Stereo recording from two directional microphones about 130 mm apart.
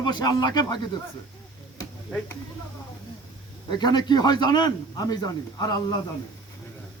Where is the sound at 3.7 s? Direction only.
35° left (ahead or behind).